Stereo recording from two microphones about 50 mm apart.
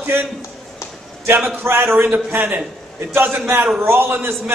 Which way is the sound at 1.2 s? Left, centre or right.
Right.